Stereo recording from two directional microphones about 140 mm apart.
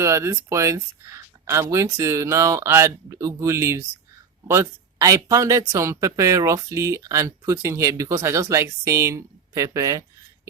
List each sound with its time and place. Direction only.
0.0 s speech: 20° right (ahead or behind)